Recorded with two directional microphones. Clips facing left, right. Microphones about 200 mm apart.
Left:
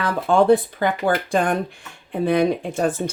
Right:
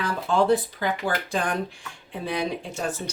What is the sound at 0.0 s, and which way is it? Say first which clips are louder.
Speech: left 5 dB; 55° left (ahead or behind).